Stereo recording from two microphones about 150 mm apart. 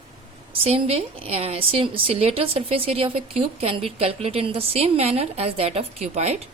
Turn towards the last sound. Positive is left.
turn(degrees=-45)  # may be behind; listen again after turning